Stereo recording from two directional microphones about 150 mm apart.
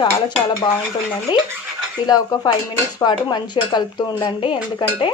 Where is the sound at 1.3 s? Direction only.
30° left (ahead or behind).